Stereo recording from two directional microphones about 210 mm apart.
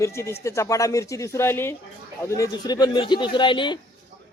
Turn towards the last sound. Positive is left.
turn(degrees=20)  # may be behind; listen again after turning